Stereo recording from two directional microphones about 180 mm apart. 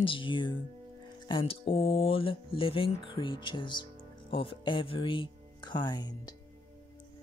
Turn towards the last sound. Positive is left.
turn(degrees=25)  # may be behind; listen again after turning